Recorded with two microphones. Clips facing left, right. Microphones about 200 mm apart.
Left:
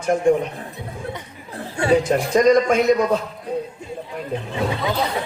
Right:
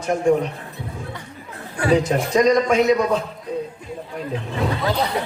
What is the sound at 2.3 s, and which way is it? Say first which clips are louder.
Speech: left 1 dB; 55° left (ahead or behind).